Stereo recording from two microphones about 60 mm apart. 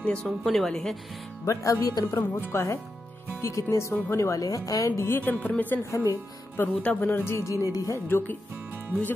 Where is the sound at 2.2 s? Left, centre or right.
Left.